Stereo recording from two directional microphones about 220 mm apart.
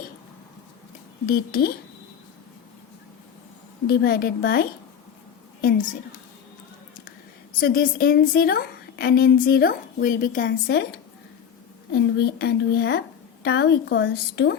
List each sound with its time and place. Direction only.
1.3 s a woman's voice: 40° left (ahead or behind)
3.8 s a woman's voice: 45° left (ahead or behind)
7.6 s a woman's voice: 40° left (ahead or behind)
11.9 s a woman's voice: 45° left (ahead or behind)